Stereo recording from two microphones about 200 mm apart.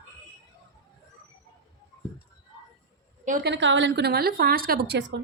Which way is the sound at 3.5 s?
65° right (ahead or behind).